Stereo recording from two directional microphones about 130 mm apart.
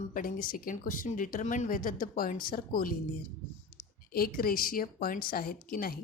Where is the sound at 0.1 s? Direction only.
90° left.